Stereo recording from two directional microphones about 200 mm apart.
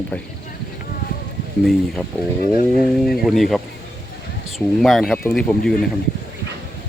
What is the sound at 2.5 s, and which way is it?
Speech, 50° left (ahead or behind).